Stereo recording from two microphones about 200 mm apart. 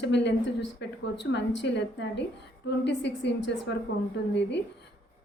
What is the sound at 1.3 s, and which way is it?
A woman's voice, 60° left (ahead or behind).